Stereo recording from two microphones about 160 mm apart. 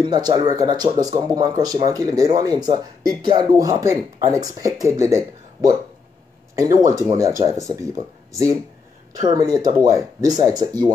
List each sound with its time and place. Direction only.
0.0 s speech: 25° right (ahead or behind)